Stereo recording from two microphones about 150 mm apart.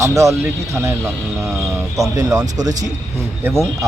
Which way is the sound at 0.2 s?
20° right (ahead or behind).